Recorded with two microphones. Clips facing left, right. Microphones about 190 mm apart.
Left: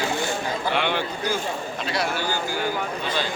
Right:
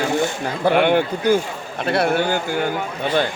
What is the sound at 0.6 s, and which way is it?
Speech, 50° right (ahead or behind).